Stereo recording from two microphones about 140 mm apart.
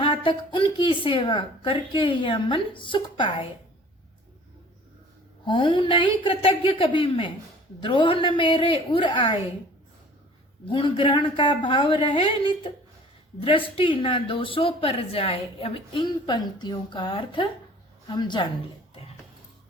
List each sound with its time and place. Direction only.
0.0 s a woman's voice: 35° left (ahead or behind)
5.5 s a woman's voice: 35° left (ahead or behind)
10.7 s a woman's voice: 35° left (ahead or behind)